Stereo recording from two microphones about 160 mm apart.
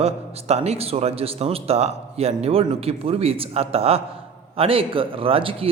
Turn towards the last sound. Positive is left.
turn(degrees=-35)  # may be behind; listen again after turning